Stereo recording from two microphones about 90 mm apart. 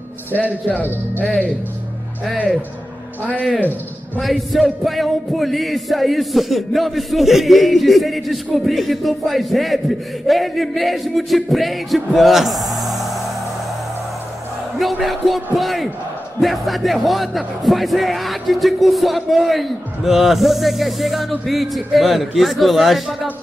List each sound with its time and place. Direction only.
0.3 s speech: 20° left (ahead or behind)
1.2 s speech: 5° left (ahead or behind)
4.2 s music: centre (ahead or behind)
14.8 s speech: centre (ahead or behind)
16.3 s music: centre (ahead or behind)